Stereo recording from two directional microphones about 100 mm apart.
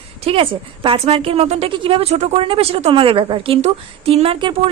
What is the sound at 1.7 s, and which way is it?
Speech, 60° right (ahead or behind).